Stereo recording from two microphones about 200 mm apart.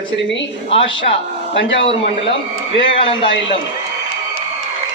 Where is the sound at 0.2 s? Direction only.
65° left (ahead or behind).